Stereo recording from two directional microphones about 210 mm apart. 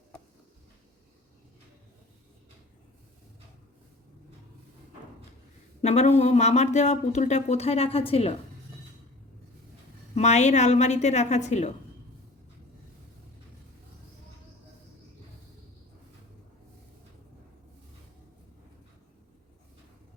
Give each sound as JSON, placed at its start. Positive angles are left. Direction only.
{"t": 5.8, "sound": "speech", "side_deg": 30}
{"t": 10.2, "sound": "speech", "side_deg": 35}